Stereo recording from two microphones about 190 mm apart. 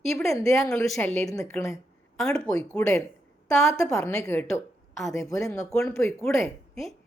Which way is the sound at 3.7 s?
15° left (ahead or behind).